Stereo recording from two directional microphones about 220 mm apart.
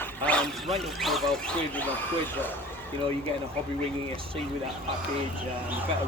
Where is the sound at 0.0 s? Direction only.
5° left (ahead or behind).